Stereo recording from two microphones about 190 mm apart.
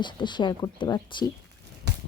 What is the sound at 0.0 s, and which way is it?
Speech, 25° left (ahead or behind).